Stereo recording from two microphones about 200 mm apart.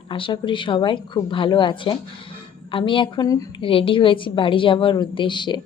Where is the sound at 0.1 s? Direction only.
25° left (ahead or behind).